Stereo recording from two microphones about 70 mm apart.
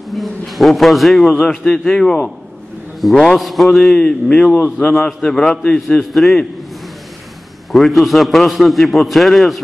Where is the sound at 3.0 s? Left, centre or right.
Centre.